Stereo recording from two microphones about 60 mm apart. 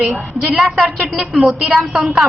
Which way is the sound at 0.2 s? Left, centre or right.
Centre.